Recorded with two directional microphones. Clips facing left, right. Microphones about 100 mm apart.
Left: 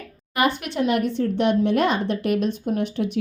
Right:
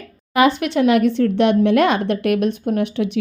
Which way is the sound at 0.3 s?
90° right.